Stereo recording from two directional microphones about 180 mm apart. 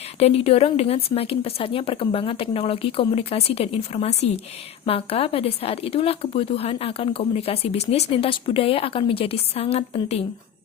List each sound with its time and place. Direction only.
0.2 s speech: 35° left (ahead or behind)